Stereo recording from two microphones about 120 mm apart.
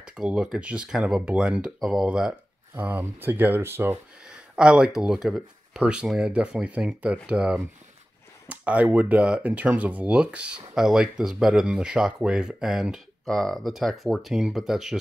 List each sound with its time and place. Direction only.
0.0 s speech: 5° right (ahead or behind)
2.7 s speech: 15° right (ahead or behind)
4.6 s speech: 5° right (ahead or behind)